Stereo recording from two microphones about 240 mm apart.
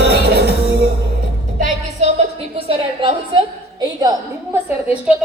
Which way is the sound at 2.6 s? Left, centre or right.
Right.